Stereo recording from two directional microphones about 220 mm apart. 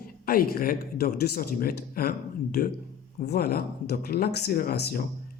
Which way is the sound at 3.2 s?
45° left (ahead or behind).